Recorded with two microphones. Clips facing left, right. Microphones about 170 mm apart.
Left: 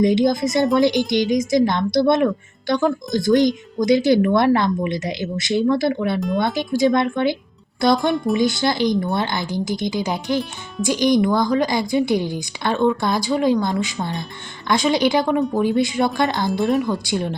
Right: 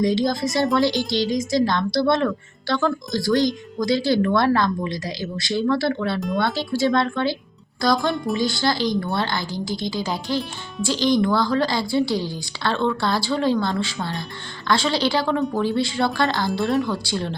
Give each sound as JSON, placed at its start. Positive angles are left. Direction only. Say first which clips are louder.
{"t": 0.0, "sound": "a woman's voice", "louder": "left 4 dB", "side_deg": 20}
{"t": 6.1, "sound": "speech", "louder": "left 3 dB", "side_deg": 0}
{"t": 6.4, "sound": "a woman's voice", "louder": "left 3 dB", "side_deg": 15}
{"t": 8.1, "sound": "speech", "louder": "left 5 dB", "side_deg": 0}
{"t": 8.4, "sound": "a woman's voice", "louder": "left 3 dB", "side_deg": 20}